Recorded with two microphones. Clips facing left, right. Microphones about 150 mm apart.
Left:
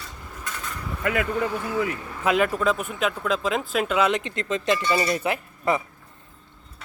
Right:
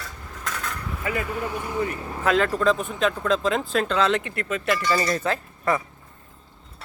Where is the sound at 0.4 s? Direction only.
70° right (ahead or behind).